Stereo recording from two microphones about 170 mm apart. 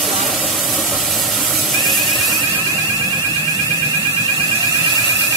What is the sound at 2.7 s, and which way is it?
Vehicle, 20° right (ahead or behind).